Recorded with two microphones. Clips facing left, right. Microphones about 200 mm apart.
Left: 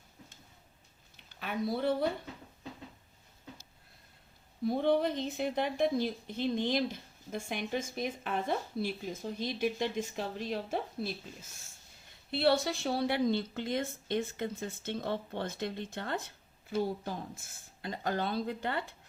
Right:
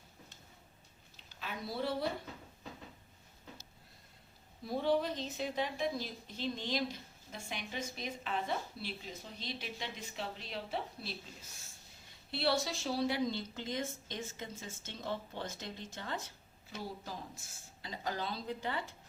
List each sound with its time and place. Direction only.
1.1 s a sound: 60° left (ahead or behind)
4.6 s a woman's voice: 55° left (ahead or behind)
12.3 s a woman's voice: 55° left (ahead or behind)